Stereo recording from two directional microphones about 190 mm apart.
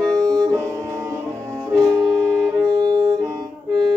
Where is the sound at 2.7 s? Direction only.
20° right (ahead or behind).